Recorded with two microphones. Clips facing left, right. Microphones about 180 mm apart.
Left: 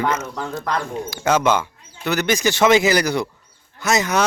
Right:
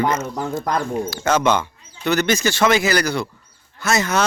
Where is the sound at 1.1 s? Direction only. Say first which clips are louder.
Left 1 dB; 10° left (ahead or behind).